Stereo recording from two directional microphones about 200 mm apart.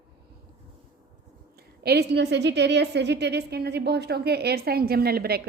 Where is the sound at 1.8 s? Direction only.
55° right (ahead or behind).